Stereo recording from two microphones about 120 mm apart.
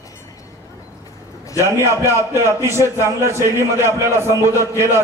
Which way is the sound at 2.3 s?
20° right (ahead or behind).